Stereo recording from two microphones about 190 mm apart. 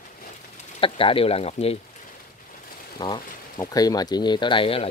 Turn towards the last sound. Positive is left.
turn(degrees=30)  # may be behind; listen again after turning